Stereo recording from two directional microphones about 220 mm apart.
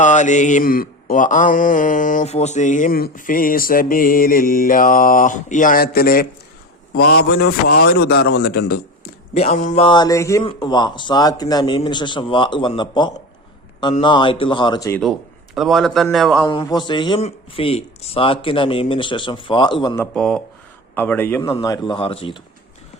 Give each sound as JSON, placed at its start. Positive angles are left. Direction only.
{"t": 0.0, "sound": "mantra", "side_deg": 35}
{"t": 6.9, "sound": "a man's voice", "side_deg": 45}
{"t": 9.3, "sound": "speech", "side_deg": 30}
{"t": 15.5, "sound": "a man's voice", "side_deg": 0}
{"t": 16.5, "sound": "speech", "side_deg": 20}
{"t": 20.0, "sound": "a man's voice", "side_deg": 0}